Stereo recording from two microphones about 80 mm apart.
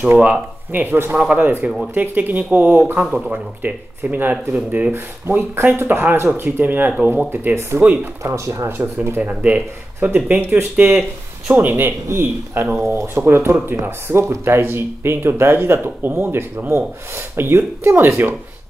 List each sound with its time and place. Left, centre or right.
0.2 s speech: centre
1.1 s speech: centre
1.4 s speech: right
4.9 s speech: right
7.8 s speech: centre
8.2 s speech: right
9.3 s speech: centre